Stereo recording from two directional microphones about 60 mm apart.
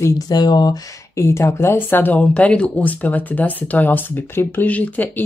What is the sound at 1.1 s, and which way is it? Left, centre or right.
Speech, left.